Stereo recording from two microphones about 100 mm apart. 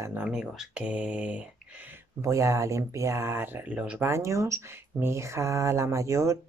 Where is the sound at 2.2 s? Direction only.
30° right (ahead or behind); by 4.0 s 10° right (ahead or behind).